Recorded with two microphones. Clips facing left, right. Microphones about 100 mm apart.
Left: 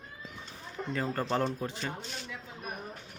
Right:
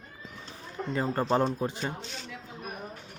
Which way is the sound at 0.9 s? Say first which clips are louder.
Right 4 dB; 25° right (ahead or behind).